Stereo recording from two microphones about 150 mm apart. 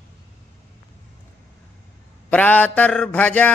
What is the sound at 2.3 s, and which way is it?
Mantra, 10° left (ahead or behind).